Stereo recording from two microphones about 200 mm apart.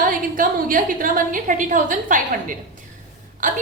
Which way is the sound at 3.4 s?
40° right (ahead or behind).